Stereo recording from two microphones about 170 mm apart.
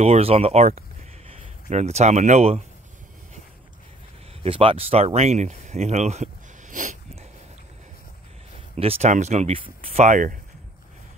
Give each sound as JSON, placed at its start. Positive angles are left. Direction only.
{"t": 0.0, "sound": "speech", "side_deg": -35}
{"t": 4.4, "sound": "speech", "side_deg": -35}
{"t": 8.7, "sound": "speech", "side_deg": -35}